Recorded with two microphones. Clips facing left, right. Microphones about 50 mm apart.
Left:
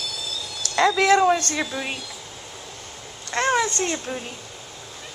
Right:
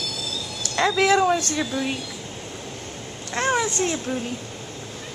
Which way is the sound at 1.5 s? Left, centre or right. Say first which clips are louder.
Right 2 dB; centre.